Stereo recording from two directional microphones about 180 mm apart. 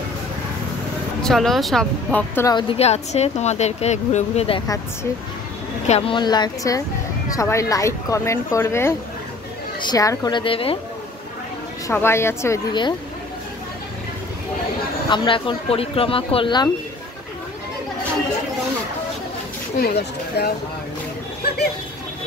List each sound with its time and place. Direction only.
1.2 s speech: centre (ahead or behind)
2.5 s speech: 35° left (ahead or behind)
5.9 s speech: 30° left (ahead or behind)
11.9 s speech: 15° left (ahead or behind)
15.0 s speech: 25° left (ahead or behind)
19.8 s speech: 65° left (ahead or behind)